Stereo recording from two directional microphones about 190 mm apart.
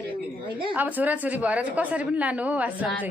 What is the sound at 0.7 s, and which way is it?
A woman's voice, 10° right (ahead or behind).